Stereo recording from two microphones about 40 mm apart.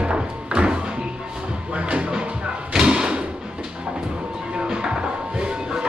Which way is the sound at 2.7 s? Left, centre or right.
Centre.